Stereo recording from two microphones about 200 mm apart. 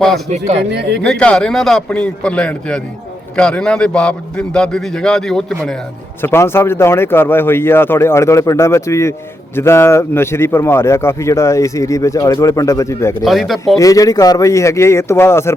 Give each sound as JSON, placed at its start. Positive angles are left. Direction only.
{"t": 0.3, "sound": "speech", "side_deg": -35}
{"t": 0.7, "sound": "speech", "side_deg": -55}
{"t": 1.0, "sound": "a man's voice", "side_deg": 5}
{"t": 13.2, "sound": "a man's voice", "side_deg": 0}
{"t": 13.7, "sound": "speech", "side_deg": 15}